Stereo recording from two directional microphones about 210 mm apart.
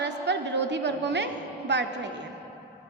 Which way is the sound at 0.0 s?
55° right (ahead or behind).